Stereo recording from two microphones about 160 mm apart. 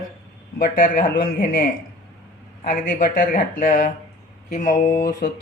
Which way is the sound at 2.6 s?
60° left (ahead or behind).